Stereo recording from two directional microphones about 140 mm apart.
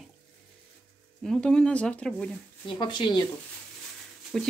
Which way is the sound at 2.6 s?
35° left (ahead or behind).